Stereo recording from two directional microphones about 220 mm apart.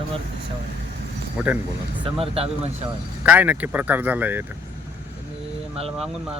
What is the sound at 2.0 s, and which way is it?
Speech, 25° right (ahead or behind).